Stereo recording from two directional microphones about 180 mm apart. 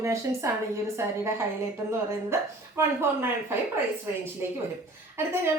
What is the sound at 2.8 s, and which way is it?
Speech, 15° right (ahead or behind).